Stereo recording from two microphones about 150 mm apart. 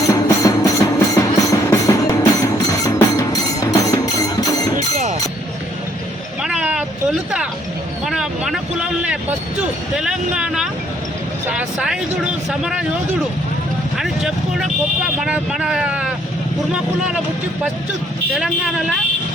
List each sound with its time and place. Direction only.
0.1 s music: 20° left (ahead or behind)
6.4 s vehicle: 5° right (ahead or behind)
8.0 s vehicle: 5° right (ahead or behind)
9.6 s speech: 5° right (ahead or behind)
14.0 s speech: centre (ahead or behind)
18.3 s speech: centre (ahead or behind)